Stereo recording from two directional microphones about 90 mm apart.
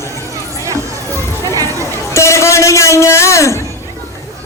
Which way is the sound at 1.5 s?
40° right (ahead or behind).